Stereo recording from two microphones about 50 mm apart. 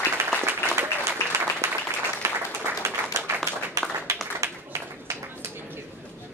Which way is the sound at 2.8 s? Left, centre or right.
Right.